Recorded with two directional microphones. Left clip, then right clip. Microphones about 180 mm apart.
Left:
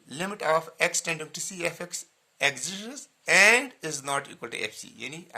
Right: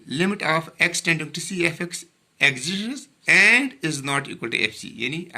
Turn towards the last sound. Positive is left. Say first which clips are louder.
# right 11 dB
turn(degrees=40)  # may be behind; listen again after turning